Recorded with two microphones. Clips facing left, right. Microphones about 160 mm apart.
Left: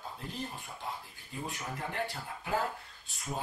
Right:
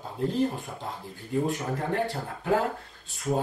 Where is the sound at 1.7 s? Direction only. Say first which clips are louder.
Right 9 dB; 40° right (ahead or behind).